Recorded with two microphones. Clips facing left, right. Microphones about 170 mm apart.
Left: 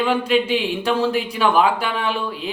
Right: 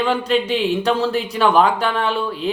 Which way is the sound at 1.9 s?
40° right (ahead or behind).